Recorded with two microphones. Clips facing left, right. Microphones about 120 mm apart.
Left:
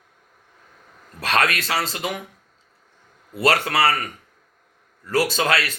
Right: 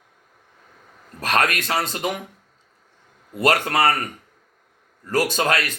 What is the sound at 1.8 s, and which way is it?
Speech, 50° right (ahead or behind).